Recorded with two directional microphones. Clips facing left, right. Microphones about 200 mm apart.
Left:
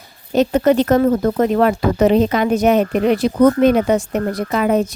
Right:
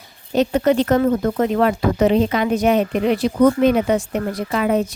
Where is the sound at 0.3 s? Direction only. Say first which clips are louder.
Left 2 dB; 45° left (ahead or behind).